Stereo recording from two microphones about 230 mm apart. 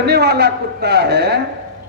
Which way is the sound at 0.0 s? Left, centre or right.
Right.